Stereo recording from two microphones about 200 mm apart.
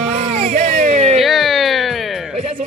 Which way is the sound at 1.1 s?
Centre (ahead or behind).